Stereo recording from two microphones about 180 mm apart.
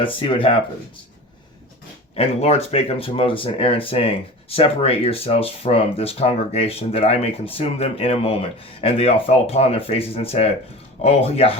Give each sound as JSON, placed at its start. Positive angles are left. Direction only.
{"t": 0.0, "sound": "speech", "side_deg": 30}
{"t": 2.1, "sound": "speech", "side_deg": 35}